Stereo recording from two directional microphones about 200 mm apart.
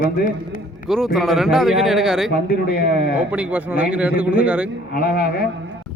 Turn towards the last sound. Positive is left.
turn(degrees=50)  # may be behind; listen again after turning